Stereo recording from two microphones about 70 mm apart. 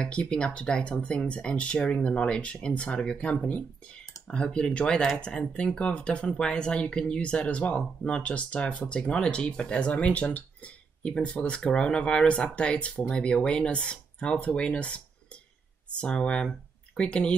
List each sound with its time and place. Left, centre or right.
0.0 s speech: centre